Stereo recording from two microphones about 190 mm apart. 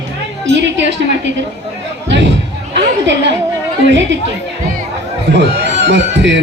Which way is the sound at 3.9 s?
70° right (ahead or behind).